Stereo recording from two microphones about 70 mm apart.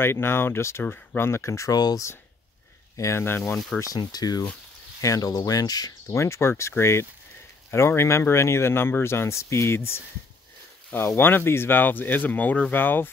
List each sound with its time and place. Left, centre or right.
0.0 s speech: left
1.7 s speech: left
3.0 s speech: left
3.9 s speech: left
5.0 s speech: left
5.3 s speech: left
6.1 s speech: left